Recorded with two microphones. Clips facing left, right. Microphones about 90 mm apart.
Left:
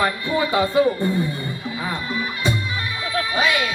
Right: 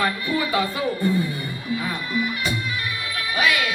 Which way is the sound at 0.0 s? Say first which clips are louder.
Left 2 dB; 25° left (ahead or behind).